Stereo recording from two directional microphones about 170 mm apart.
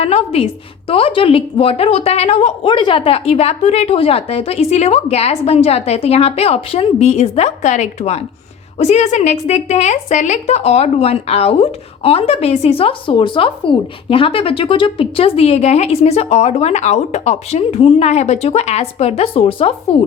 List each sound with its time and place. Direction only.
0.0 s a woman's voice: 35° left (ahead or behind)